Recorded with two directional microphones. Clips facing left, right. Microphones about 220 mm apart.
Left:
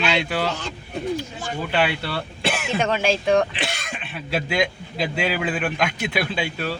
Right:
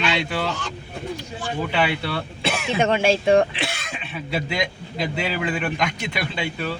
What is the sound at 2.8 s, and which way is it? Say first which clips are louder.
Speech: right 3 dB; 25° right (ahead or behind).